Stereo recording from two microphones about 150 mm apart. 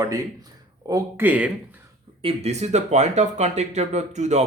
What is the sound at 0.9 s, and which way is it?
Speech, 25° right (ahead or behind).